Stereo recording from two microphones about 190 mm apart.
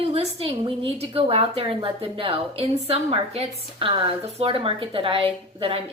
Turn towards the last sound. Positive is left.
turn(degrees=-30)  # may be behind; listen again after turning